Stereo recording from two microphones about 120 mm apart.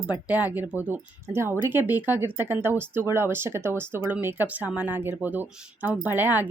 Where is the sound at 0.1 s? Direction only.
10° right (ahead or behind).